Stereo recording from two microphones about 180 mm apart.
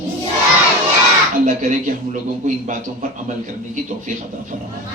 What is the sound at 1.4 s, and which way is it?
A man's voice, 45° right (ahead or behind).